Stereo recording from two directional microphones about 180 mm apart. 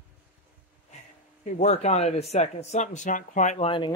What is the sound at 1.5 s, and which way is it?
Speech, 35° left (ahead or behind).